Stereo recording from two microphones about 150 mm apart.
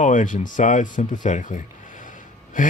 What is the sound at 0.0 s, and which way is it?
Speech, 60° left (ahead or behind).